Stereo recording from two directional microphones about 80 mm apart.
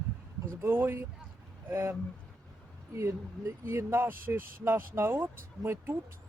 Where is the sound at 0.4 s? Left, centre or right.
Right.